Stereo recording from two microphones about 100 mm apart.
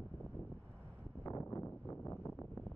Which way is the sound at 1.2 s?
30° left (ahead or behind).